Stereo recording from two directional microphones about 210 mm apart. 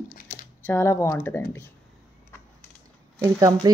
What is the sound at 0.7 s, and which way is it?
Speech, 10° left (ahead or behind).